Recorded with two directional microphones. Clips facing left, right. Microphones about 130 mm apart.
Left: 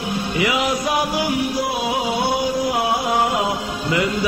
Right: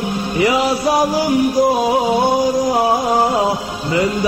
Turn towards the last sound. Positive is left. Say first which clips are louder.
# right 4 dB
turn(degrees=-35)  # may be behind; listen again after turning